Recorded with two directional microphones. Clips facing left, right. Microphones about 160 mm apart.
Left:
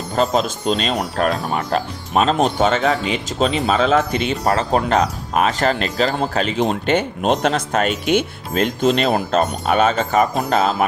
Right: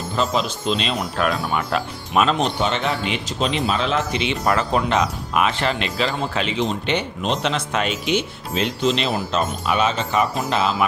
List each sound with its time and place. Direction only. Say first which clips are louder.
0.2 s speech: left 4 dB; 45° left (ahead or behind)
4.4 s speech: left 2 dB; 30° left (ahead or behind)